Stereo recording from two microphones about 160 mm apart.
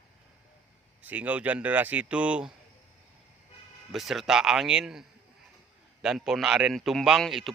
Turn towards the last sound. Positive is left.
turn(degrees=0)  # may be behind; listen again after turning